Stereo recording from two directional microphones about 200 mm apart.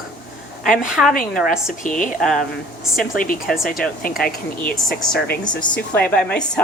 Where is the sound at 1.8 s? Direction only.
40° left (ahead or behind).